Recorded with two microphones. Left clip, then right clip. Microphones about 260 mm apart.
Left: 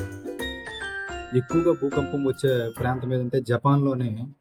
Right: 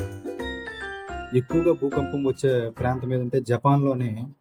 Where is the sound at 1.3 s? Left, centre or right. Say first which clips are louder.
Right 1 dB; centre.